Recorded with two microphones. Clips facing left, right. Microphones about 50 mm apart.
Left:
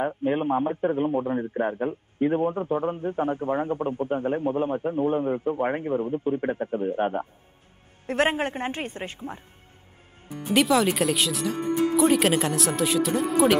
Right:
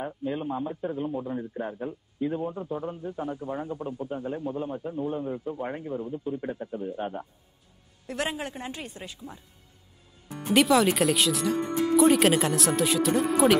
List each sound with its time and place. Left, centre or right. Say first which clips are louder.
0.0 s a man's voice: left 7 dB; left
10.4 s speech: even; centre